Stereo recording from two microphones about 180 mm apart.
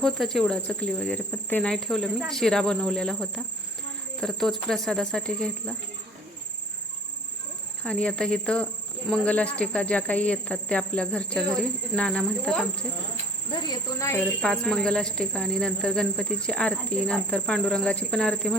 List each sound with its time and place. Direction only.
0.0 s speech: centre (ahead or behind)
7.9 s speech: 5° left (ahead or behind)
13.5 s speech: 25° left (ahead or behind)
14.4 s speech: 5° left (ahead or behind)